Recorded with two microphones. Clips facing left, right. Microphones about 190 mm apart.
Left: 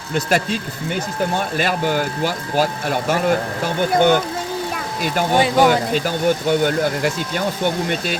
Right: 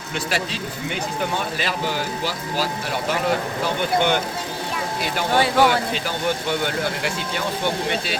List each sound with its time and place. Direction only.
0.1 s speech: 45° left (ahead or behind)
1.5 s speech: 50° left (ahead or behind)
5.3 s speech: 15° left (ahead or behind)
5.9 s speech: 45° left (ahead or behind)